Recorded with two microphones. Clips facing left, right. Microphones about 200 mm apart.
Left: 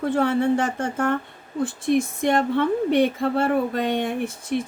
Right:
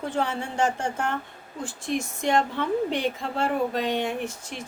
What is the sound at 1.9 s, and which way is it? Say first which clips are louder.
Speech: left 4 dB; 55° left (ahead or behind).